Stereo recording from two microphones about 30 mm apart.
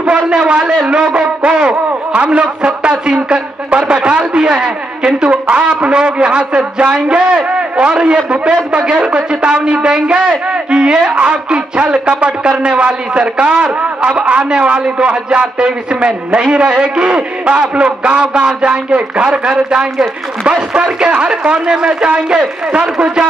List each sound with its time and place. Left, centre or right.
0.0 s a man's voice: right
2.1 s a man's voice: right
11.1 s a man's voice: right